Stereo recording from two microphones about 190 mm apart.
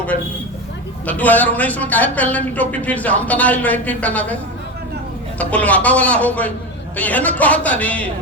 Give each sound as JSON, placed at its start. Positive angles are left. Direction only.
{"t": 1.0, "sound": "a man's voice", "side_deg": 10}
{"t": 5.4, "sound": "a man's voice", "side_deg": 5}